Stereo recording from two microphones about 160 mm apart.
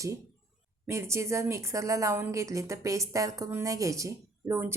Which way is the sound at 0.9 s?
15° right (ahead or behind).